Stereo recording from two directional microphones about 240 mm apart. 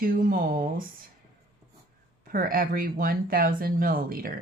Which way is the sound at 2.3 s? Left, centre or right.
Right.